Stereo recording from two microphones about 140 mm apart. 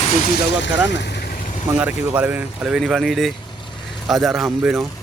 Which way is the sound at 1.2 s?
70° left (ahead or behind).